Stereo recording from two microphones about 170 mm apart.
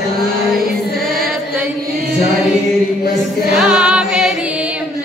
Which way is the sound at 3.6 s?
5° right (ahead or behind).